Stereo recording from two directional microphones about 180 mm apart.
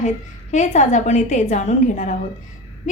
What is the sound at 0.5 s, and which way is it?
A woman's voice, 45° left (ahead or behind).